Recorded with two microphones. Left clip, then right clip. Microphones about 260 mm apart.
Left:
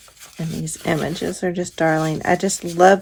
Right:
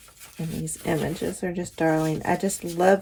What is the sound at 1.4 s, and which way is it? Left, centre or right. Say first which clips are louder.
Speech: left 7 dB; left.